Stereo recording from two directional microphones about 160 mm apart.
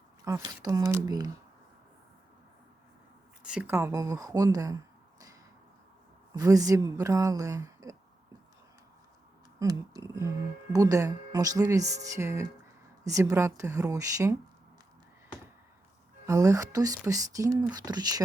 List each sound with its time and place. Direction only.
0.3 s speech: 20° right (ahead or behind)
3.4 s speech: 5° right (ahead or behind)
6.3 s speech: 20° right (ahead or behind)
9.6 s speech: 20° right (ahead or behind)
16.2 s speech: 20° right (ahead or behind)